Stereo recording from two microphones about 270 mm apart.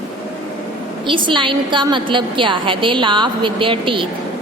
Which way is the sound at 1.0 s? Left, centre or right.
Centre.